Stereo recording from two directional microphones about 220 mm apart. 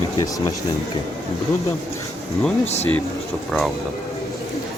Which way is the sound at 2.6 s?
30° left (ahead or behind).